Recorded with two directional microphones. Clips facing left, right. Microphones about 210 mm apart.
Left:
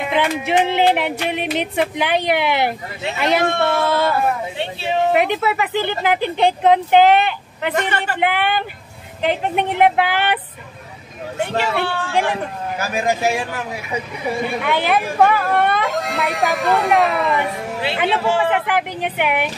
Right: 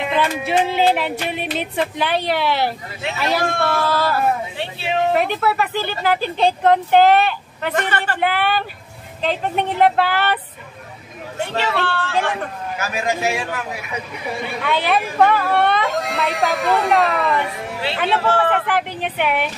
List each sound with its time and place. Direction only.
0.1 s music: 15° left (ahead or behind)
5.1 s speech: 20° left (ahead or behind)
12.7 s a man's voice: 35° left (ahead or behind)
14.6 s a woman's voice: 15° left (ahead or behind)
17.8 s speech: 15° left (ahead or behind)